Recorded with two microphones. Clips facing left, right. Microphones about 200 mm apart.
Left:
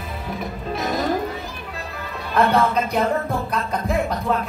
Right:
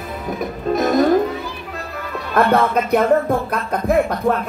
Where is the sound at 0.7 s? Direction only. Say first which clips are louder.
Right 9 dB; 50° right (ahead or behind).